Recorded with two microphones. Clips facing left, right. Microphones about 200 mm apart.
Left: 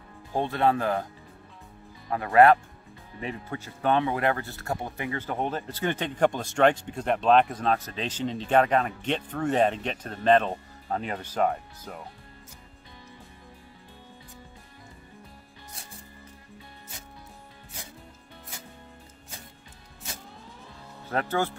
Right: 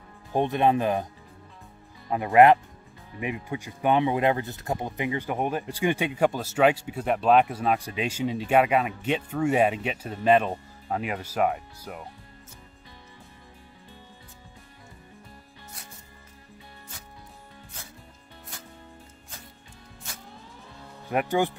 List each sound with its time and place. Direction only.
0.3 s speech: 20° right (ahead or behind)
2.0 s speech: 20° right (ahead or behind)
21.1 s speech: 15° right (ahead or behind)